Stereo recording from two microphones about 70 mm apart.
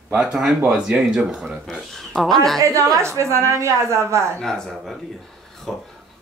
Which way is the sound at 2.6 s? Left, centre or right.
Right.